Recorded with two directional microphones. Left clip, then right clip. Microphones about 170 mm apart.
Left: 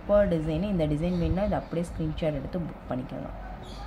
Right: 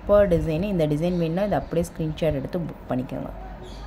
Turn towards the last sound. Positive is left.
turn(degrees=-30)  # may be behind; listen again after turning